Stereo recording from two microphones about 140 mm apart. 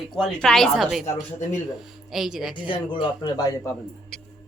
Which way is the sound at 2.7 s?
35° left (ahead or behind).